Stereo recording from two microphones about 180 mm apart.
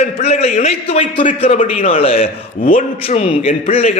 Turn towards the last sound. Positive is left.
turn(degrees=35)  # may be behind; listen again after turning